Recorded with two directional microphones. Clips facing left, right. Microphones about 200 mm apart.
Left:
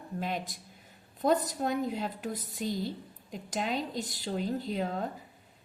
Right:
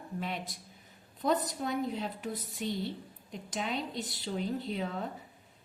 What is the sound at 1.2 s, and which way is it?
A woman's voice, 45° left (ahead or behind).